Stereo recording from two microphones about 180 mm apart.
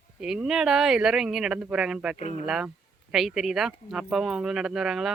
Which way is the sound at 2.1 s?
40° left (ahead or behind).